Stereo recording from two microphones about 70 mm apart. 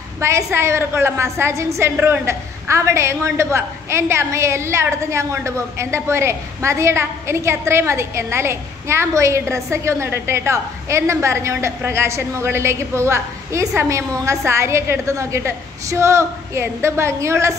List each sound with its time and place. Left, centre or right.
0.2 s a woman's voice: right